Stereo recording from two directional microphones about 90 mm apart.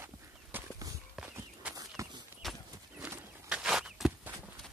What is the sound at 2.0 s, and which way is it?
Run, 35° right (ahead or behind).